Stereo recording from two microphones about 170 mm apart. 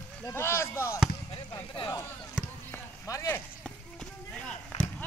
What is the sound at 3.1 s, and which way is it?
Speech, 20° left (ahead or behind).